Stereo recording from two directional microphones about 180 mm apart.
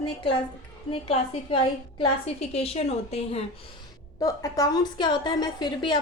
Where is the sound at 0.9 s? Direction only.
30° left (ahead or behind).